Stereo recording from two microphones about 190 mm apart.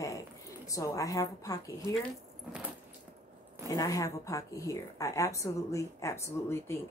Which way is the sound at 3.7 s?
15° left (ahead or behind).